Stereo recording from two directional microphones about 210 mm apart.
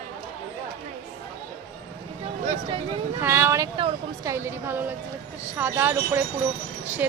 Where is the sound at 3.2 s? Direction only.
10° right (ahead or behind).